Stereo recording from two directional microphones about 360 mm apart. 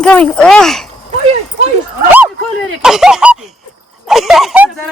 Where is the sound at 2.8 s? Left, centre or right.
Centre.